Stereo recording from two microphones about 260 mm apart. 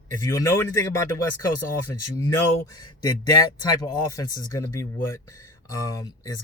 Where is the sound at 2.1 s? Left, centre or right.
Centre.